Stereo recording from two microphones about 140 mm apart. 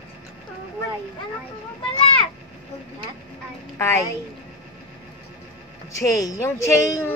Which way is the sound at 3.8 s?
20° left (ahead or behind).